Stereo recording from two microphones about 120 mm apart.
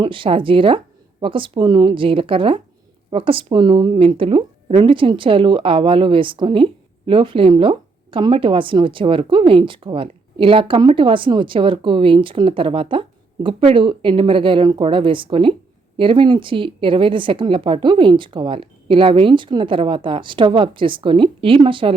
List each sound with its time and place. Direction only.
0.0 s speech: 45° right (ahead or behind)